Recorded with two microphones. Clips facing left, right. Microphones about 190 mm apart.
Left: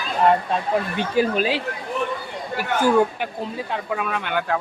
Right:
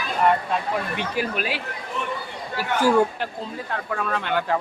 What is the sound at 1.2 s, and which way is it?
Speech, 25° left (ahead or behind).